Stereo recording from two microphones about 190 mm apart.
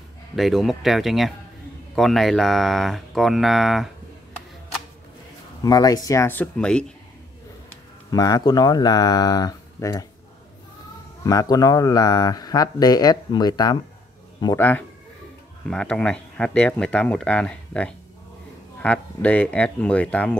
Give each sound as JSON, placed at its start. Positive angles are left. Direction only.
{"t": 0.4, "sound": "speech", "side_deg": 0}
{"t": 5.6, "sound": "speech", "side_deg": 20}
{"t": 8.1, "sound": "speech", "side_deg": 20}
{"t": 11.2, "sound": "speech", "side_deg": 20}